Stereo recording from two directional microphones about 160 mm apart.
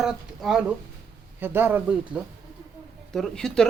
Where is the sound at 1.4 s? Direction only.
15° right (ahead or behind).